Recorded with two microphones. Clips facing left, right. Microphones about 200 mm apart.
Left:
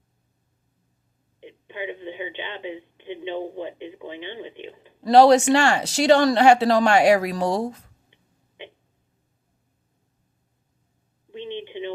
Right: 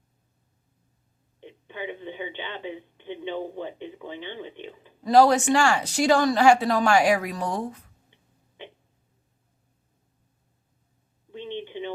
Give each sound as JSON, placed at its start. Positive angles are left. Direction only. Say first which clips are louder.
{"t": 1.4, "sound": "speech", "louder": "left 2 dB", "side_deg": 15}
{"t": 5.0, "sound": "speech", "louder": "left 4 dB", "side_deg": 75}
{"t": 11.3, "sound": "a sound", "louder": "left 2 dB", "side_deg": 15}